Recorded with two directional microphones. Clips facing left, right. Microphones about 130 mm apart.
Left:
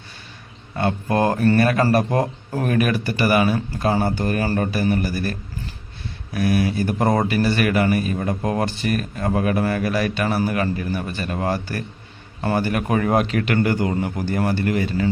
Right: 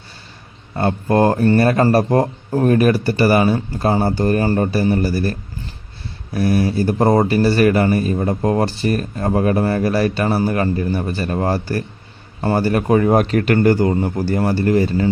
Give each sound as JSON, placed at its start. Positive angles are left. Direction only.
{"t": 0.8, "sound": "speech", "side_deg": -35}